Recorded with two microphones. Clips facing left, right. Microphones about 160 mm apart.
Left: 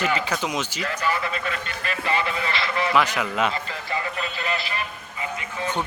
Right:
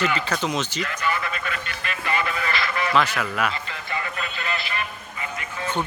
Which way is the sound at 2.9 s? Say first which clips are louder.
Even; 15° left (ahead or behind).